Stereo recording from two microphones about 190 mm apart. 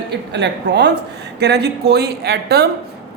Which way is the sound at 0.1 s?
60° right (ahead or behind).